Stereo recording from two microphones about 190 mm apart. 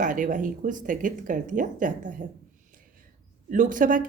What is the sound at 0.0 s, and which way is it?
A woman's voice, 45° right (ahead or behind).